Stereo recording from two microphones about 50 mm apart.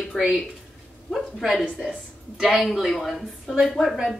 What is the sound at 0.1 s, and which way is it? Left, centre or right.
Speech, centre.